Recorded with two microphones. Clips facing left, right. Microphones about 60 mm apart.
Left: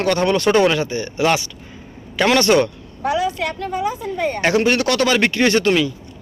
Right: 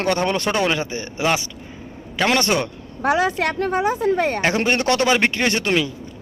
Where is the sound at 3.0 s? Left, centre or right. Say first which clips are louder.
Right 1 dB; right.